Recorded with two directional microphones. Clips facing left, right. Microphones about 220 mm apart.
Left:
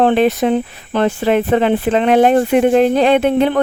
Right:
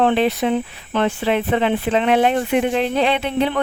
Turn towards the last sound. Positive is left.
turn(degrees=50)  # may be behind; listen again after turning